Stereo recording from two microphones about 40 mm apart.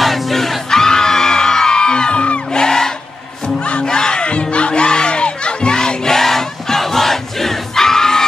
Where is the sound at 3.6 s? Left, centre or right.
Left.